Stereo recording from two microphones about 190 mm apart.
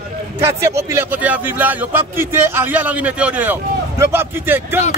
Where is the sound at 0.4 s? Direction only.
15° right (ahead or behind).